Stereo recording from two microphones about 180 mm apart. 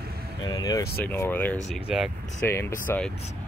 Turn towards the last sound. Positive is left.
turn(degrees=10)  # may be behind; listen again after turning